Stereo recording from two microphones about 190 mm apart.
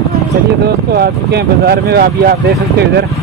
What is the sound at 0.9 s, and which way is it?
Speech, 55° right (ahead or behind).